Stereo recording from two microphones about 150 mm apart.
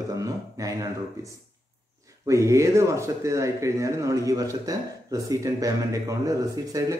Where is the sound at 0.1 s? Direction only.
25° right (ahead or behind).